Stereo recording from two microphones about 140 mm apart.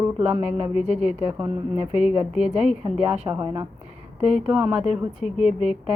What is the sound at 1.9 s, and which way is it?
Speech, 10° right (ahead or behind).